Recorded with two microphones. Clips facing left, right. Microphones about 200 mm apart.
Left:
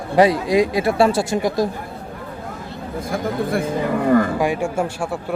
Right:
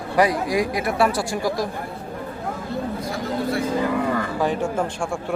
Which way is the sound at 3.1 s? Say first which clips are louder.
Left 5 dB; 50° left (ahead or behind).